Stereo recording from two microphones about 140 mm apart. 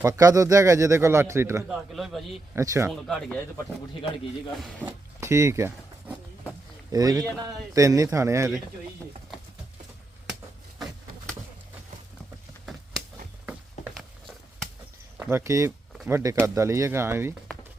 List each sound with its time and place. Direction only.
0.0 s speech: 25° right (ahead or behind)
1.6 s a man's voice: centre (ahead or behind)
2.6 s speech: 20° right (ahead or behind)
2.9 s a man's voice: centre (ahead or behind)
4.9 s a sound: 20° right (ahead or behind)
6.9 s speech: 25° right (ahead or behind)
13.4 s a sound: 5° right (ahead or behind)
15.2 s speech: 20° right (ahead or behind)